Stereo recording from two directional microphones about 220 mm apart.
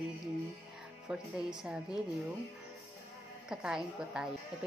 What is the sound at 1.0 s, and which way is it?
Speech, 5° right (ahead or behind).